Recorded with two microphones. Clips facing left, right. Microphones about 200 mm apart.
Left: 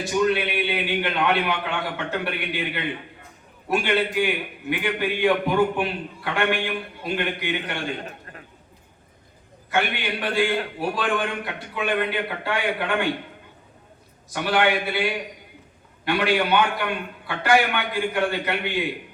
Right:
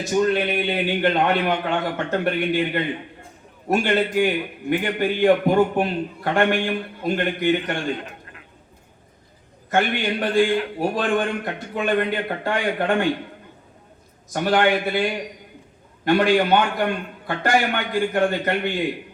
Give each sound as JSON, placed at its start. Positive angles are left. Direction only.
{"t": 0.0, "sound": "a man's voice", "side_deg": -45}
{"t": 8.0, "sound": "a sound", "side_deg": 40}
{"t": 9.6, "sound": "a man's voice", "side_deg": -45}
{"t": 14.3, "sound": "a man's voice", "side_deg": -45}
{"t": 16.0, "sound": "a man's voice", "side_deg": -45}